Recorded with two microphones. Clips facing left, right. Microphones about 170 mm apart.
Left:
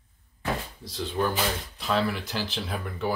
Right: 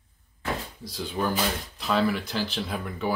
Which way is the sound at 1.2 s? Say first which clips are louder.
Even; centre (ahead or behind).